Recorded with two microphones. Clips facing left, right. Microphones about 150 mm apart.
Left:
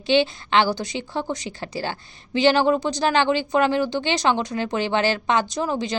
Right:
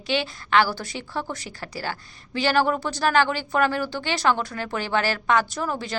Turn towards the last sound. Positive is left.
turn(degrees=20)  # may be behind; listen again after turning